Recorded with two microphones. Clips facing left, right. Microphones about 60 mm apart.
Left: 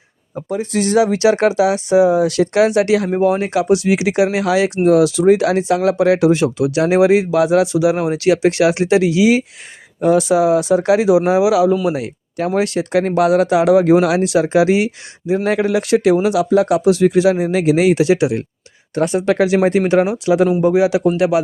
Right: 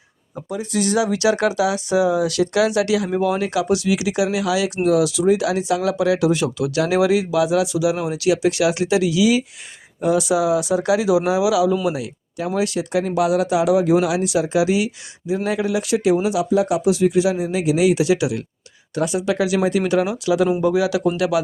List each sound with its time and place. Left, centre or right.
0.5 s speech: left
12.5 s a man's voice: left